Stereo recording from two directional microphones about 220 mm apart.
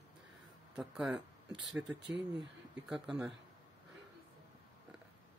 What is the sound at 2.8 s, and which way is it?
Speech, centre (ahead or behind).